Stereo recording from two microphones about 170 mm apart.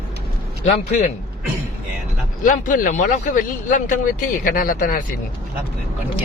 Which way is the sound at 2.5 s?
50° left (ahead or behind).